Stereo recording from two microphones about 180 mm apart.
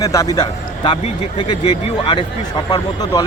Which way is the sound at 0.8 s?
30° left (ahead or behind).